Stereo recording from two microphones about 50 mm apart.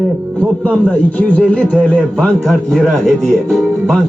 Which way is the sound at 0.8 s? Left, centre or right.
Left.